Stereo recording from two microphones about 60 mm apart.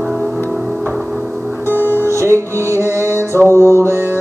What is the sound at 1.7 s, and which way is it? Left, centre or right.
Music, right.